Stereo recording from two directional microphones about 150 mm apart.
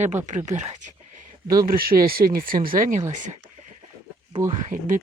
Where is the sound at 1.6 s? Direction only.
75° right (ahead or behind).